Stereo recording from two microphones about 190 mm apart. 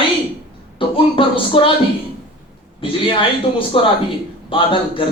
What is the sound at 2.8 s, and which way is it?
A man's voice, 25° left (ahead or behind).